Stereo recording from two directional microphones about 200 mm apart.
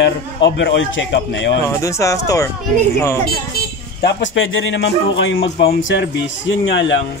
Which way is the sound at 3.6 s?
50° left (ahead or behind).